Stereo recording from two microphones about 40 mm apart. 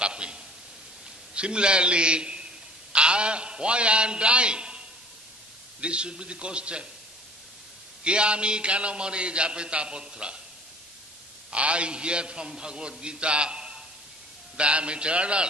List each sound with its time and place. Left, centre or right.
0.0 s a sound: right
1.3 s a man's voice: right
8.0 s a man's voice: right
11.5 s a man's voice: right